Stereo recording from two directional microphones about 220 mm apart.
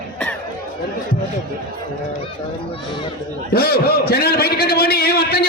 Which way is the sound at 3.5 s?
45° left (ahead or behind).